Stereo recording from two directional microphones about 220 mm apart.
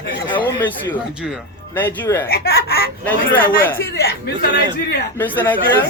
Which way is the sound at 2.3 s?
45° left (ahead or behind).